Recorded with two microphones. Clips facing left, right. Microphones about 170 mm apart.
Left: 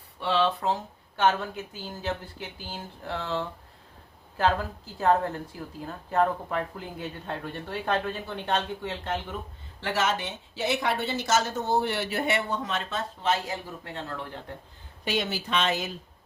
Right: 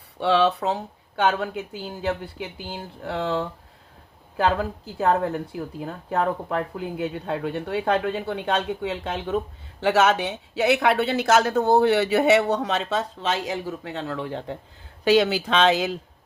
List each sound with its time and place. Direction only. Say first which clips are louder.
0.2 s speech: right 5 dB; 75° right (ahead or behind)
1.5 s speech: right 6 dB; 15° right (ahead or behind)
3.1 s speech: right 7 dB; 75° right (ahead or behind)
4.9 s speech: right 2 dB; 75° right (ahead or behind); by 16.0 s 90° right